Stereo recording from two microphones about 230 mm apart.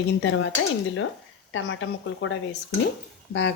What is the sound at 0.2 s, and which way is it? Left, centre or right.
Speech, left.